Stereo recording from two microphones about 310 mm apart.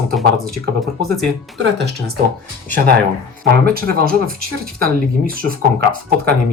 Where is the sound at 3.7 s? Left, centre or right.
Right.